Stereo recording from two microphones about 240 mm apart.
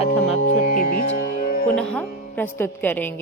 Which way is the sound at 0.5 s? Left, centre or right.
Left.